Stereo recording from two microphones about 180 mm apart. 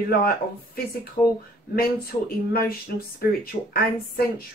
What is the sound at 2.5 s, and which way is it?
Speech, 55° left (ahead or behind).